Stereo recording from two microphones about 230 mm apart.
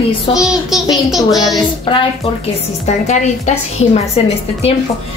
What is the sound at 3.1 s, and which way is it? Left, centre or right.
A woman's voice, left.